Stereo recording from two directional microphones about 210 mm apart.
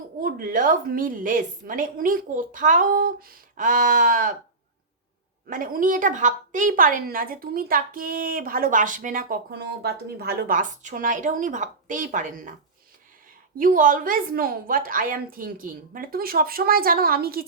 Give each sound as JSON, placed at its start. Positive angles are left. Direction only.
{"t": 0.2, "sound": "a woman's voice", "side_deg": -40}
{"t": 5.5, "sound": "a woman's voice", "side_deg": -40}
{"t": 13.6, "sound": "a woman's voice", "side_deg": -40}